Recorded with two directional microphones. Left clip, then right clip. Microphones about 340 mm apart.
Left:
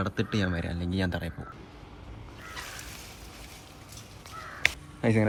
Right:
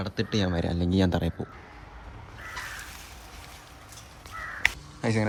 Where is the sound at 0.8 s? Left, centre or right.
Centre.